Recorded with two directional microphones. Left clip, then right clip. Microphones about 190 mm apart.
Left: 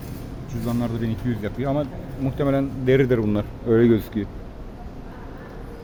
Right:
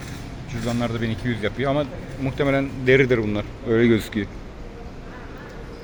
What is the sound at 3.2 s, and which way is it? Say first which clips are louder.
Speech: left 2 dB; 30° left (ahead or behind).